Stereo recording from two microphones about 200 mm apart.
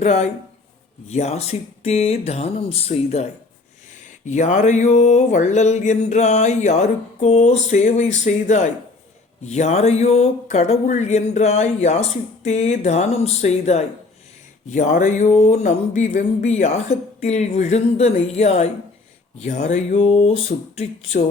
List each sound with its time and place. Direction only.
0.0 s speech: 35° left (ahead or behind)
4.3 s speech: 35° left (ahead or behind)